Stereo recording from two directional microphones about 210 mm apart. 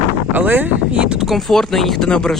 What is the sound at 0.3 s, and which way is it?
Speech, 10° right (ahead or behind).